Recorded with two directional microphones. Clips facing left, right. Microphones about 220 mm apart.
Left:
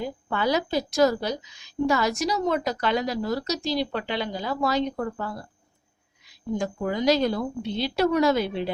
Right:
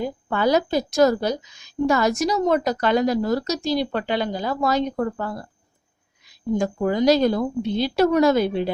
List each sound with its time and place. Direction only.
0.0 s a woman's voice: 45° right (ahead or behind)
6.6 s a woman's voice: 45° right (ahead or behind)